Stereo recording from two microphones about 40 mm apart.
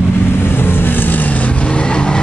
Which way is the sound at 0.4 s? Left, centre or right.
Left.